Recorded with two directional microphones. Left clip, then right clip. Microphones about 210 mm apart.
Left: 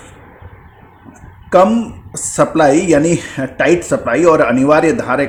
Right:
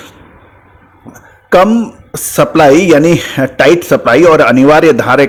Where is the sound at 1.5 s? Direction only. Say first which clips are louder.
Right 3 dB; 35° right (ahead or behind).